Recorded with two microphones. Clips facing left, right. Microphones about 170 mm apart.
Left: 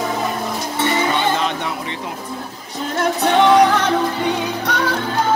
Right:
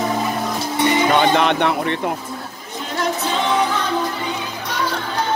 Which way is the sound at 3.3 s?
65° left (ahead or behind).